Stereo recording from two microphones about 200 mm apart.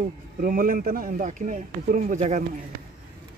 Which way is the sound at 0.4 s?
45° right (ahead or behind).